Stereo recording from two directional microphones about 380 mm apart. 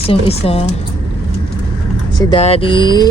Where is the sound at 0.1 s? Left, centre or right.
Centre.